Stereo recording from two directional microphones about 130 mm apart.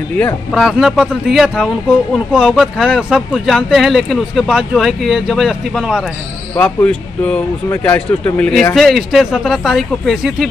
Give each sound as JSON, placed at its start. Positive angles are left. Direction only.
{"t": 0.5, "sound": "a man's voice", "side_deg": 0}
{"t": 6.5, "sound": "a man's voice", "side_deg": 10}